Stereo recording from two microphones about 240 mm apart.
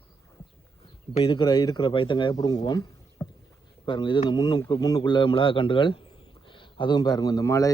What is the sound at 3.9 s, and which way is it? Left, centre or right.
A man's voice, centre.